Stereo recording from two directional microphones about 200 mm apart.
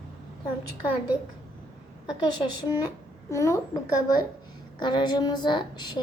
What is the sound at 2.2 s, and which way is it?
A woman's voice, 20° left (ahead or behind).